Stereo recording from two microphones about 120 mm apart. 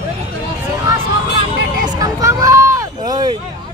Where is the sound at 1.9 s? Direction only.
25° right (ahead or behind).